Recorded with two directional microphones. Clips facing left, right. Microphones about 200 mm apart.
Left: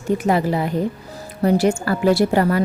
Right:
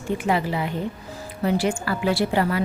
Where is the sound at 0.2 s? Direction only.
40° left (ahead or behind).